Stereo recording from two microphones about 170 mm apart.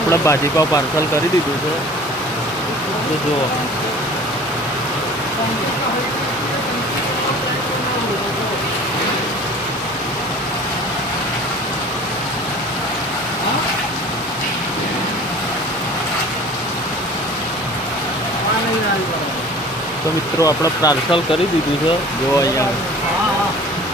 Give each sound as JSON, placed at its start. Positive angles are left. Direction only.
{"t": 0.1, "sound": "speech", "side_deg": 20}
{"t": 20.4, "sound": "speech", "side_deg": 20}